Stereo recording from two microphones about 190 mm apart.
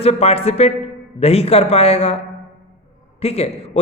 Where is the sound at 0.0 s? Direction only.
35° left (ahead or behind).